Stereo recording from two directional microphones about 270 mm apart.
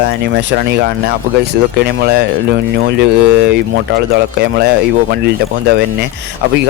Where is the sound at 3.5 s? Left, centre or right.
Right.